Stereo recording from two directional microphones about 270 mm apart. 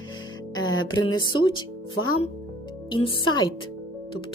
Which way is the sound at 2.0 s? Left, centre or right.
Left.